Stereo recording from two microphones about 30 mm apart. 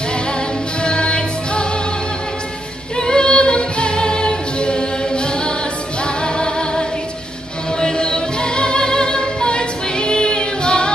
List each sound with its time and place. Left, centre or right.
0.8 s music: left
3.0 s singing: left
6.2 s music: left